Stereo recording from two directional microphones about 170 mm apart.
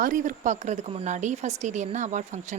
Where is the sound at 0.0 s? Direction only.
50° right (ahead or behind).